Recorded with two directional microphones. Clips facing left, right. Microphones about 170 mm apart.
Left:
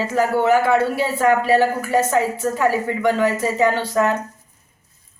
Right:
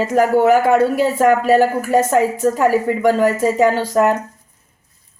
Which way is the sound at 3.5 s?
40° right (ahead or behind).